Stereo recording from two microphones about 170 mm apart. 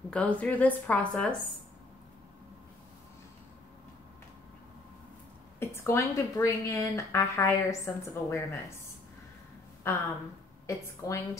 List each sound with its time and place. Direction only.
0.1 s a woman's voice: 10° left (ahead or behind)
5.6 s a woman's voice: 15° left (ahead or behind)